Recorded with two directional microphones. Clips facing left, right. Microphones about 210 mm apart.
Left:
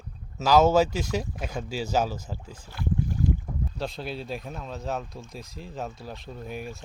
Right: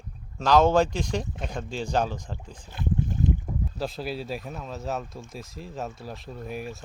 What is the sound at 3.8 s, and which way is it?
Speech, centre (ahead or behind).